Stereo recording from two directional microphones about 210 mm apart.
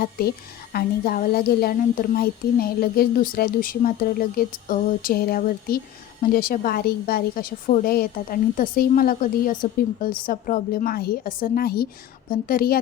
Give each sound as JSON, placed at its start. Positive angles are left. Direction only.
{"t": 0.0, "sound": "a woman's voice", "side_deg": 45}